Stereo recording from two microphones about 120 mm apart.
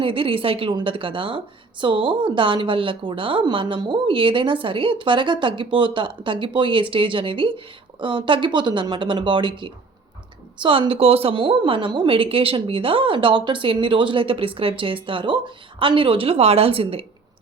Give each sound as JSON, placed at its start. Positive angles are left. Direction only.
{"t": 0.0, "sound": "a woman's voice", "side_deg": -50}